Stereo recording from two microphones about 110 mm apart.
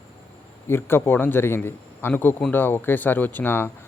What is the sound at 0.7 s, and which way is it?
A man's voice, 20° left (ahead or behind).